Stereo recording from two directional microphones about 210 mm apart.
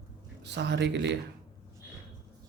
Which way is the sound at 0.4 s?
55° right (ahead or behind).